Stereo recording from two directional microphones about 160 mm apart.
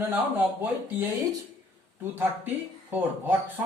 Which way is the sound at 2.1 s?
10° right (ahead or behind).